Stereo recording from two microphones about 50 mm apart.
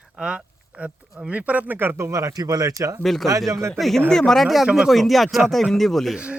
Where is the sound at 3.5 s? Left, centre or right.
Right.